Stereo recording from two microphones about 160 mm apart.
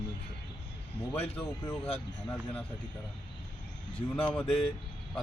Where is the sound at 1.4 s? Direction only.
10° left (ahead or behind).